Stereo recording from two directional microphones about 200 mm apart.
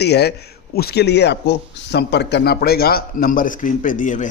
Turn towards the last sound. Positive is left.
turn(degrees=40)  # may be behind; listen again after turning